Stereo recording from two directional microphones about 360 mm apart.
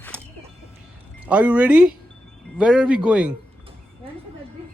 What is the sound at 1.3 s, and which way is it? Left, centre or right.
Speech, centre.